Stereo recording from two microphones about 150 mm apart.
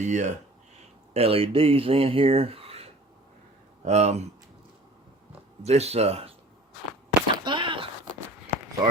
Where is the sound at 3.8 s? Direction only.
45° right (ahead or behind).